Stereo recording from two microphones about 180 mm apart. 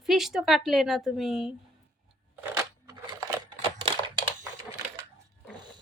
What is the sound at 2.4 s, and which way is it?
Crushing, 15° right (ahead or behind).